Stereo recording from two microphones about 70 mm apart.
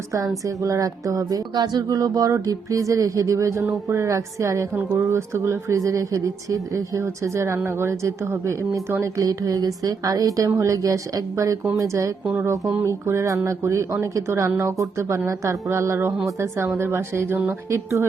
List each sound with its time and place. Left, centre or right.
0.1 s music: right
4.7 s music: right
9.2 s a woman's voice: right
10.5 s music: right
16.4 s a woman's voice: right